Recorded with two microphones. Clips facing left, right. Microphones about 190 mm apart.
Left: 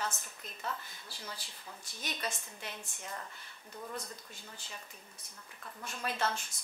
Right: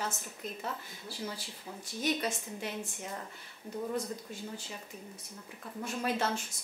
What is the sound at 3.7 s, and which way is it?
Speech, 20° right (ahead or behind).